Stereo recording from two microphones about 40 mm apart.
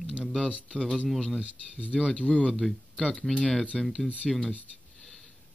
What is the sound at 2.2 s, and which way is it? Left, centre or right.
Speech, left.